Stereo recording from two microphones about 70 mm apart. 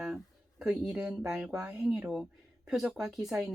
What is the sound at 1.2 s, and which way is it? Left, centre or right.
Speech, centre.